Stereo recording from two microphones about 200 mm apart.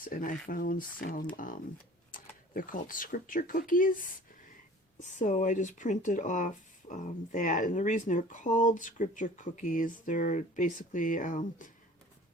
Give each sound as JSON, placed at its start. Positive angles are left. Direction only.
{"t": 0.0, "sound": "speech", "side_deg": 45}
{"t": 4.9, "sound": "speech", "side_deg": 40}